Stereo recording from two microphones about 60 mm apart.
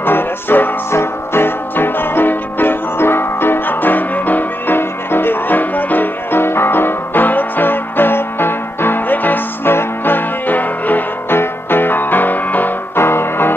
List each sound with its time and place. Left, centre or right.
0.0 s music: left